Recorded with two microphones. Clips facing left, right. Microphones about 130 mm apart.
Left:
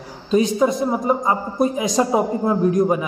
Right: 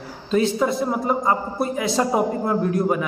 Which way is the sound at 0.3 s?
15° left (ahead or behind).